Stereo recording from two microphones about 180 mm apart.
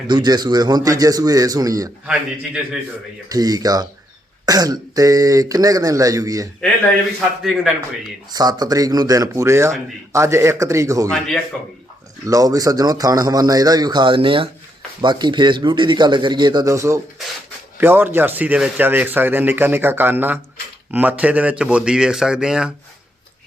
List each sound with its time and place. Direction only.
0.1 s speech: 25° right (ahead or behind)
3.2 s speech: 20° right (ahead or behind)
7.4 s a man's voice: centre (ahead or behind)
8.3 s a man's voice: 20° right (ahead or behind)
12.2 s a man's voice: 20° right (ahead or behind)